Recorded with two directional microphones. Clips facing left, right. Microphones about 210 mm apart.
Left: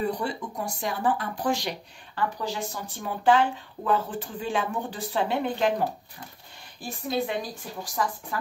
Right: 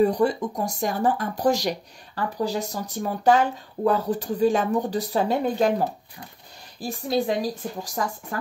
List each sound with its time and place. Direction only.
0.0 s speech: 40° right (ahead or behind)
6.8 s speech: 35° right (ahead or behind)